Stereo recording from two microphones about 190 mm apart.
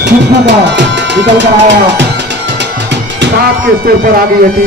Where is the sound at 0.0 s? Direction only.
65° right (ahead or behind).